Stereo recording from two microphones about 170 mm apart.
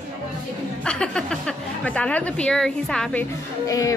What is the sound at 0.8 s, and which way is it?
A woman's voice, 5° left (ahead or behind).